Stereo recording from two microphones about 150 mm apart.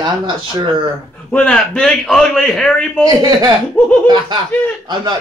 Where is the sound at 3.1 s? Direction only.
25° right (ahead or behind).